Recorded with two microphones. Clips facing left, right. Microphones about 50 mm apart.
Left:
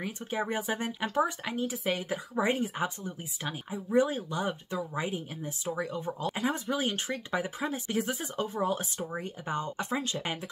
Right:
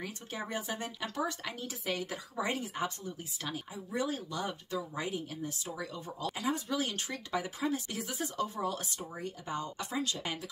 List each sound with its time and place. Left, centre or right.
0.0 s speech: left